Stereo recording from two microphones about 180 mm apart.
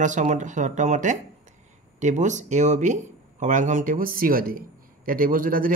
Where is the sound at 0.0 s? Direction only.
45° right (ahead or behind).